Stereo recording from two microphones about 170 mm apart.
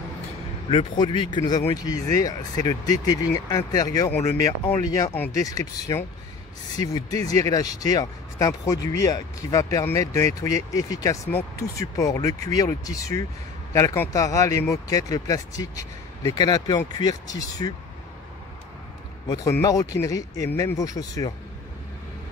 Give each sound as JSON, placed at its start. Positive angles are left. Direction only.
{"t": 0.7, "sound": "speech", "side_deg": 30}
{"t": 19.2, "sound": "speech", "side_deg": 20}